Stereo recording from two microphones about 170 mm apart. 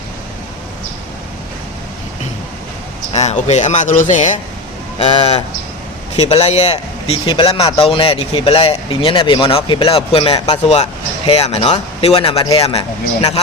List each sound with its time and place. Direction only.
3.1 s speech: 40° left (ahead or behind)